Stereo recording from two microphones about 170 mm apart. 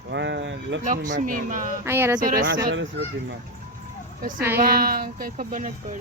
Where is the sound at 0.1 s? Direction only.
90° right.